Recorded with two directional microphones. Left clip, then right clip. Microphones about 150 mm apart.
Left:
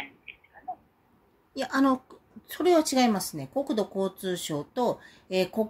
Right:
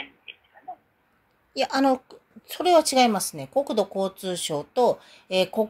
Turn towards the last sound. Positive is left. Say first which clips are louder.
# right 4 dB
turn(degrees=-10)  # may be behind; listen again after turning